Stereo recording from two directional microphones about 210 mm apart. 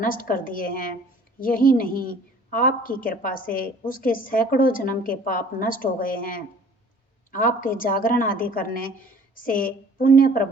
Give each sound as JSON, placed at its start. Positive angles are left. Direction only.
{"t": 0.0, "sound": "a woman's voice", "side_deg": 40}